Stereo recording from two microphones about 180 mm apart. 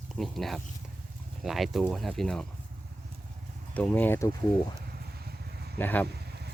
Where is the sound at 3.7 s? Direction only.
10° left (ahead or behind).